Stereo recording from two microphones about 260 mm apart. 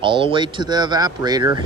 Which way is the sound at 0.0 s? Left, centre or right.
Centre.